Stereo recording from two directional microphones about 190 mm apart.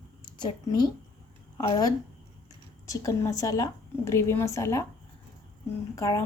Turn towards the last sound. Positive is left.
turn(degrees=15)  # may be behind; listen again after turning